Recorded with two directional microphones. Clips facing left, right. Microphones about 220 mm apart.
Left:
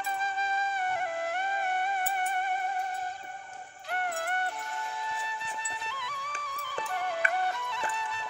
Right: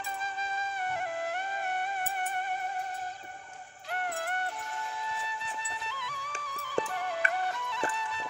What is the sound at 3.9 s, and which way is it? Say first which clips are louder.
Music: left 2 dB; 60° left (ahead or behind).